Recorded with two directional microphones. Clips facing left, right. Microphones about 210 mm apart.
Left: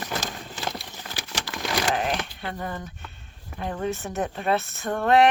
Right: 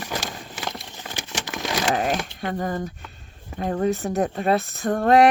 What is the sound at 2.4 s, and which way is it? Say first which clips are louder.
Speech: right 6 dB; 40° right (ahead or behind).